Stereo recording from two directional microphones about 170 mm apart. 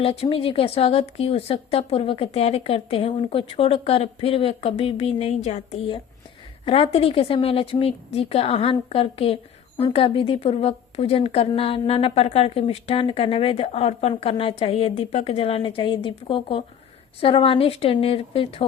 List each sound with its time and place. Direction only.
0.0 s a woman's voice: 35° left (ahead or behind)